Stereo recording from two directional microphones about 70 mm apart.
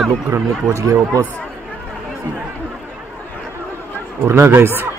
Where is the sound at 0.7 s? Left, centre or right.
Right.